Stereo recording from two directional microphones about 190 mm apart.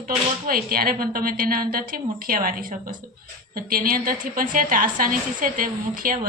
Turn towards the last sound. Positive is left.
turn(degrees=-45)  # may be behind; listen again after turning